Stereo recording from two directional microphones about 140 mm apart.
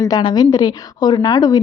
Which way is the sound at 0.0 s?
30° left (ahead or behind).